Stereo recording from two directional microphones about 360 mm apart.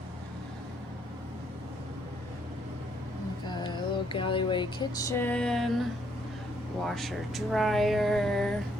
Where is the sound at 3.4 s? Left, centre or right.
Centre.